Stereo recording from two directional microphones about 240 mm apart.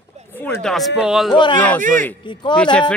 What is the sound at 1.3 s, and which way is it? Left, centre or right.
Speech, centre.